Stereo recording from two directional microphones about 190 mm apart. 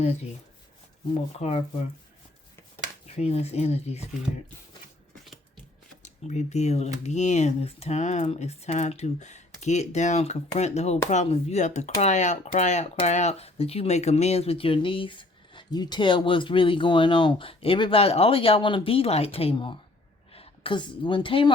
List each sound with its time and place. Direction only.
1.4 s speech: 35° left (ahead or behind)
3.2 s speech: 35° left (ahead or behind)
6.0 s a woman's voice: 40° left (ahead or behind)